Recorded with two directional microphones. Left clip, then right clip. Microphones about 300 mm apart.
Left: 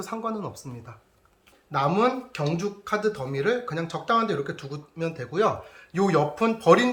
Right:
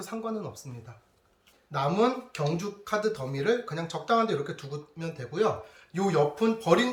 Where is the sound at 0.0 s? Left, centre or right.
Centre.